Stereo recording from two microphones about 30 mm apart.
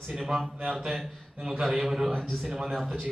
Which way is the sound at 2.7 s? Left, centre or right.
Centre.